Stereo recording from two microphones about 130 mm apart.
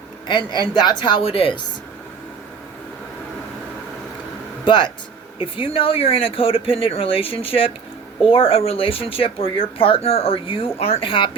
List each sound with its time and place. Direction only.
0.3 s a woman's voice: 35° left (ahead or behind)
4.6 s speech: 35° left (ahead or behind)